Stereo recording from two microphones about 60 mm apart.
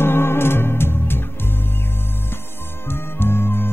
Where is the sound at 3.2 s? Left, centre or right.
Left.